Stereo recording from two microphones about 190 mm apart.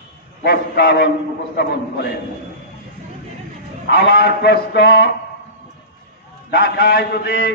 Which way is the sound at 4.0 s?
65° left (ahead or behind).